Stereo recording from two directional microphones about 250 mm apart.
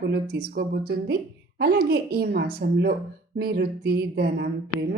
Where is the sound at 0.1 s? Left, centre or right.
Right.